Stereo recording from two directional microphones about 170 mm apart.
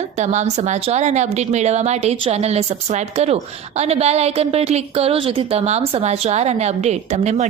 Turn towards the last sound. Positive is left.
turn(degrees=-45)  # may be behind; listen again after turning